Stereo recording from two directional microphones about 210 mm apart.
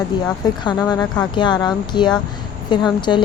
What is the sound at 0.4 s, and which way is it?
A woman's voice, 20° left (ahead or behind).